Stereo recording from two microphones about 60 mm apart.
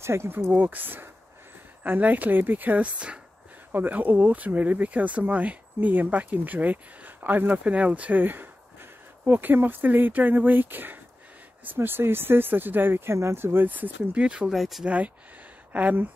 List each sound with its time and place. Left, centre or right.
0.0 s speech: right
0.5 s speech: right
14.2 s speech: centre
14.5 s speech: centre
15.7 s speech: right